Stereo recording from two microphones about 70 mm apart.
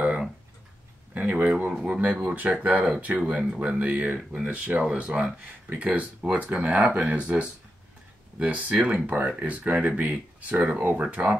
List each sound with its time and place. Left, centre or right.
0.0 s tick-tock: centre
1.1 s speech: centre
2.0 s speech: right